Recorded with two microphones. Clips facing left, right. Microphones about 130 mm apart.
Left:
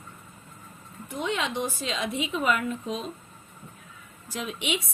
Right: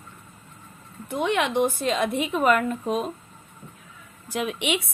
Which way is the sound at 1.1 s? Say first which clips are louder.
Right 6 dB; 65° right (ahead or behind).